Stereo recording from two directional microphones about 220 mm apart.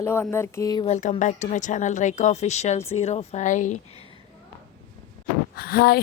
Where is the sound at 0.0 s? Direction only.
10° left (ahead or behind).